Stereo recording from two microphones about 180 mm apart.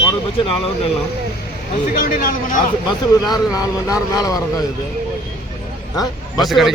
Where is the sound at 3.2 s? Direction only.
20° left (ahead or behind).